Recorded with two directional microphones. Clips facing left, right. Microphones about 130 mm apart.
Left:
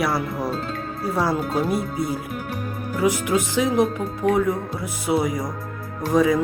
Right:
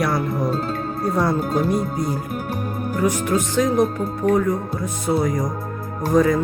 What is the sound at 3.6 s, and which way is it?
Speech, 45° right (ahead or behind).